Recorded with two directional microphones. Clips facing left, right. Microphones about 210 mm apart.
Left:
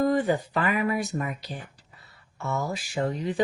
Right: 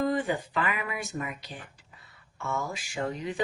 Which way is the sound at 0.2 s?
40° left (ahead or behind).